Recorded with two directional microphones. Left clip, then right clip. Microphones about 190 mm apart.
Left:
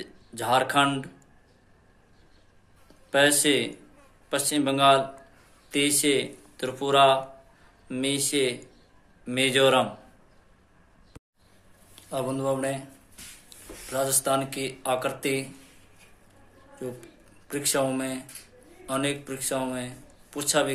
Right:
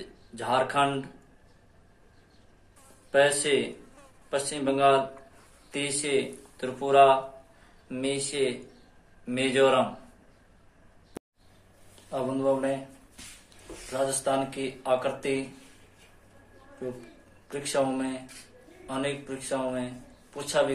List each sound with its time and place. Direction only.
0.0 s speech: 60° left (ahead or behind)
3.1 s a man's voice: 55° left (ahead or behind)
11.9 s speech: 60° left (ahead or behind)
13.8 s a man's voice: 60° left (ahead or behind)
17.5 s a man's voice: 60° left (ahead or behind)